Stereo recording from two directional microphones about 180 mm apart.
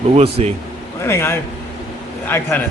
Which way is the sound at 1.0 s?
15° left (ahead or behind).